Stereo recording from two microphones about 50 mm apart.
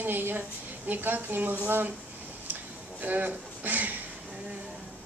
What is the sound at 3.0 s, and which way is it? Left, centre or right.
Speech, right.